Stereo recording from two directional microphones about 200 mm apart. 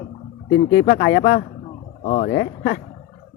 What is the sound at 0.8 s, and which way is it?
Speech, 35° left (ahead or behind).